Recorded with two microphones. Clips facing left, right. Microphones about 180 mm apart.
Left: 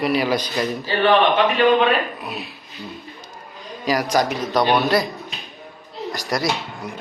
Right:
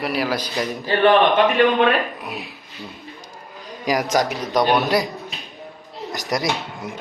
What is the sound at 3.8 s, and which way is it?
A man's voice, 20° right (ahead or behind).